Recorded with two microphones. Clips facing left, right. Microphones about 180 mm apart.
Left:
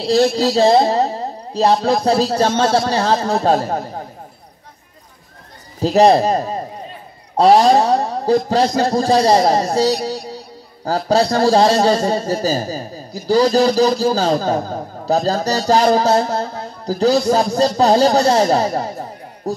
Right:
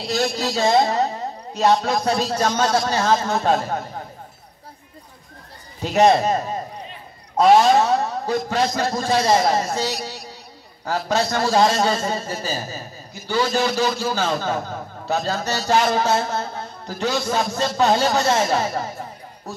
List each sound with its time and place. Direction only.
0.0 s a man's voice: 30° left (ahead or behind)
5.8 s a man's voice: 35° left (ahead or behind)